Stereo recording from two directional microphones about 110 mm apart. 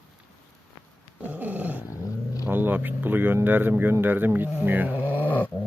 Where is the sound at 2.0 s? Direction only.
30° left (ahead or behind).